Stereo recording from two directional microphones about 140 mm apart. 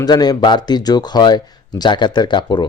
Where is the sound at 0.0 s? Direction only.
30° left (ahead or behind).